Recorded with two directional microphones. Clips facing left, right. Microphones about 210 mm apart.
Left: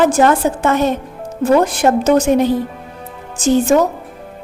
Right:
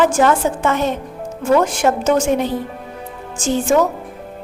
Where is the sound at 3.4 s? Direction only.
40° left (ahead or behind).